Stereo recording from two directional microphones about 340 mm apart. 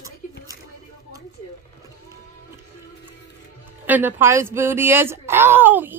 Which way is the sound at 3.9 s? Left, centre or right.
Centre.